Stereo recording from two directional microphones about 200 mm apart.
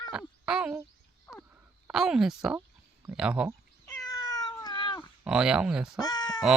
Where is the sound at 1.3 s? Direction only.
10° left (ahead or behind).